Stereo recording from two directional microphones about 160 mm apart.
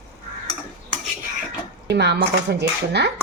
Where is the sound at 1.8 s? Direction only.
90° right.